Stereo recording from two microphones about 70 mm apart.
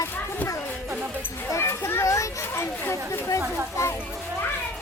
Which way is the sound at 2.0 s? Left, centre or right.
Left.